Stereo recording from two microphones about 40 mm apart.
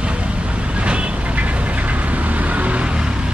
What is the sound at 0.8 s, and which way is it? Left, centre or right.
Vehicle, right.